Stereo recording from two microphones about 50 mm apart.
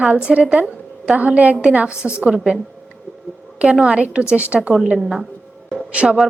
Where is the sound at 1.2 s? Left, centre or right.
Right.